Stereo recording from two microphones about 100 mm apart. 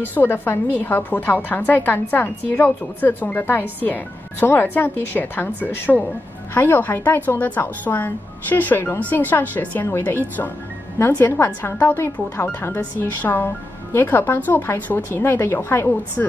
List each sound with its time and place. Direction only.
0.0 s a woman's voice: 20° left (ahead or behind)